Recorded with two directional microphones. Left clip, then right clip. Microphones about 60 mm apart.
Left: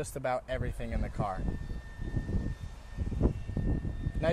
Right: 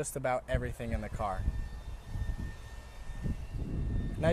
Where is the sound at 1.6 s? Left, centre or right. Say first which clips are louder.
Left 5 dB; right.